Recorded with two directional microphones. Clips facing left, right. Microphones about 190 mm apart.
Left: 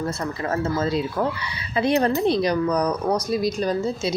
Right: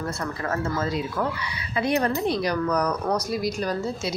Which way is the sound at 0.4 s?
25° left (ahead or behind).